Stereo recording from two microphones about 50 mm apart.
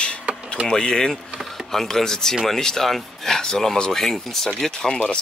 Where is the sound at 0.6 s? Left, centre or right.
Centre.